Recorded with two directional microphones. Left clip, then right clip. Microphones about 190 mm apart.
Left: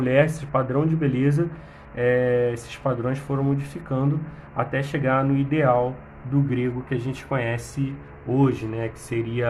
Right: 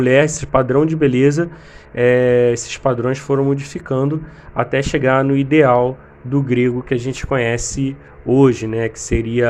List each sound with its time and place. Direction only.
0.0 s speech: 40° right (ahead or behind)